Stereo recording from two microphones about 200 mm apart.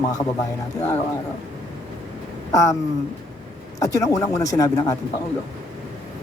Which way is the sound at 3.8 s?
15° left (ahead or behind).